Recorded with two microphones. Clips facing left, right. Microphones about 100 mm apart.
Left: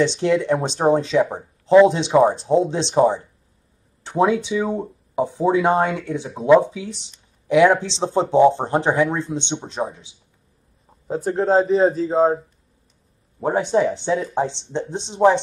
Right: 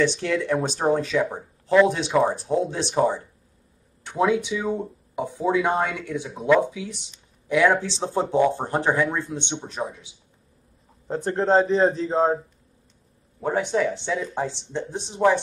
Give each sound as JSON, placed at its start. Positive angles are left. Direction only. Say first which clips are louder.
{"t": 0.2, "sound": "speech", "louder": "left 5 dB", "side_deg": 25}
{"t": 11.1, "sound": "a man's voice", "louder": "left 2 dB", "side_deg": 5}
{"t": 13.4, "sound": "speech", "louder": "left 4 dB", "side_deg": 30}